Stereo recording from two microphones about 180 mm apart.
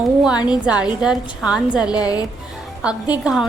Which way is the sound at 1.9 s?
20° left (ahead or behind).